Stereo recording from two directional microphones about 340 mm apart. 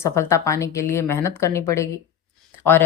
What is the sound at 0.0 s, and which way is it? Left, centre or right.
Speech, centre.